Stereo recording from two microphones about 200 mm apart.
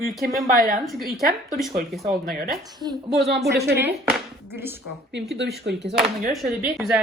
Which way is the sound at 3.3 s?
55° right (ahead or behind).